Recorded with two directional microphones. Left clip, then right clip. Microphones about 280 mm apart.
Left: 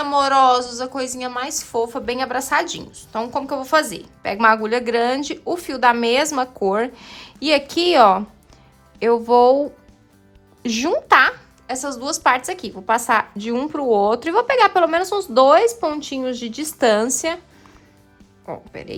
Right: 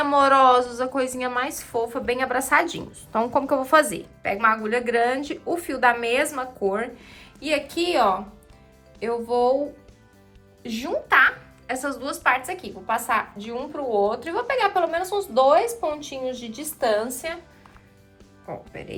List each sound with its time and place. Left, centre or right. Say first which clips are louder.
0.0 s a woman's voice: left 1 dB; centre; by 17.3 s left
18.4 s a woman's voice: left 4 dB; centre